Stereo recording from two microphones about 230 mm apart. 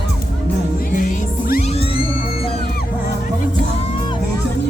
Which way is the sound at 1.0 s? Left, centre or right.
Left.